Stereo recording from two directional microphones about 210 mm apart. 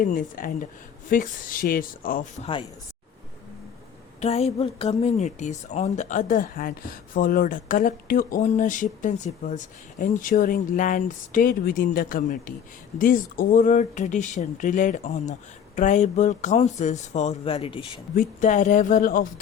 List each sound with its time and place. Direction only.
0.0 s a woman's voice: 40° left (ahead or behind)
4.2 s a woman's voice: 30° left (ahead or behind)
18.2 s a woman's voice: 35° left (ahead or behind)